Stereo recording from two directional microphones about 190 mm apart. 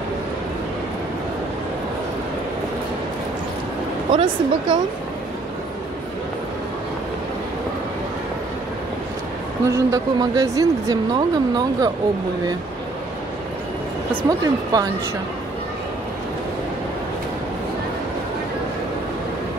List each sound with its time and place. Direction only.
4.1 s speech: 25° right (ahead or behind)
9.7 s speech: 15° right (ahead or behind)
14.4 s speech: 20° right (ahead or behind)